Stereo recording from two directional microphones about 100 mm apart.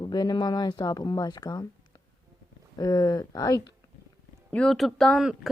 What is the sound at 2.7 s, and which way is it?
Speech, 40° left (ahead or behind).